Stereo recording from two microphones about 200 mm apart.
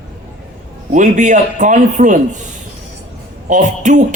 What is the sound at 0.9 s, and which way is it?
A man's voice, 40° right (ahead or behind).